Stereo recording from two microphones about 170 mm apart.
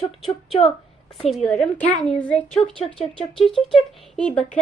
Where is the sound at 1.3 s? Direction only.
Centre (ahead or behind).